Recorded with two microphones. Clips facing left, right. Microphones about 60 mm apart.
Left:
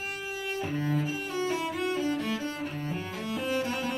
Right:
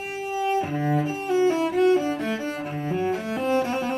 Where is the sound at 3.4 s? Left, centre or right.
Right.